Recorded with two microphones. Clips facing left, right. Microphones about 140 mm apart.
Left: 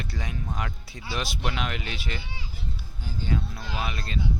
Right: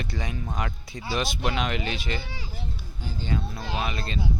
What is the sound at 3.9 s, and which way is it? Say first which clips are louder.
Speech: right 3 dB; centre (ahead or behind).